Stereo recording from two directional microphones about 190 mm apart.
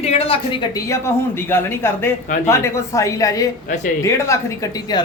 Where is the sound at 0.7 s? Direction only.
15° left (ahead or behind).